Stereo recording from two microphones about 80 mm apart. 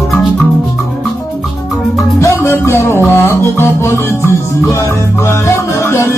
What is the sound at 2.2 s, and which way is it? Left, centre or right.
Music, left.